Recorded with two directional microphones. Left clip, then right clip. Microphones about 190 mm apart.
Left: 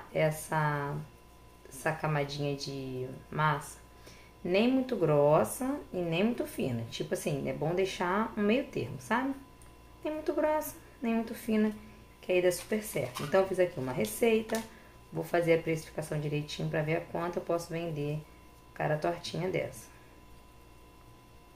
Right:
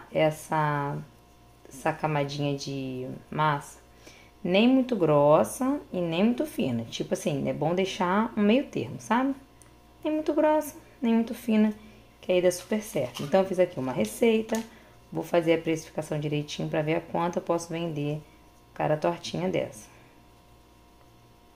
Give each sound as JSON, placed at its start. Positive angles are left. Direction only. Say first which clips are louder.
{"t": 0.1, "sound": "speech", "louder": "right 5 dB", "side_deg": -40}